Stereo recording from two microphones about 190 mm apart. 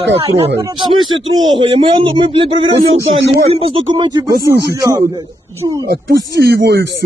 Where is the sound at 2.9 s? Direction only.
70° right (ahead or behind).